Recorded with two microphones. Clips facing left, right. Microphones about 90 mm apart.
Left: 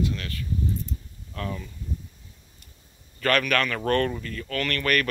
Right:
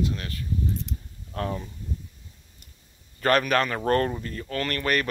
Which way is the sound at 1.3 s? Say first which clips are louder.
Right 3 dB; 40° right (ahead or behind).